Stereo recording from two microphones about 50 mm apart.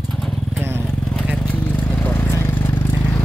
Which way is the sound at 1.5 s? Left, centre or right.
Left.